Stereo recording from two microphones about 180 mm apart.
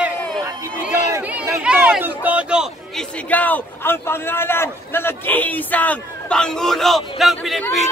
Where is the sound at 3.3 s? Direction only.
10° left (ahead or behind).